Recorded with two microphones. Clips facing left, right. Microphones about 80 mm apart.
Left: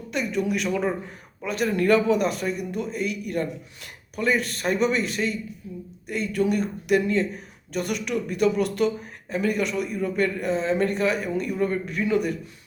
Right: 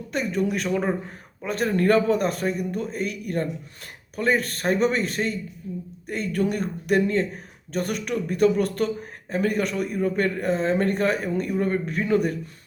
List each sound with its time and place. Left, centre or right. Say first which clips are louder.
0.1 s a man's voice: right 1 dB; right